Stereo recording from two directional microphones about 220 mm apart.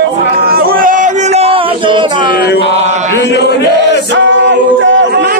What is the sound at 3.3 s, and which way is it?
Speech, 50° left (ahead or behind).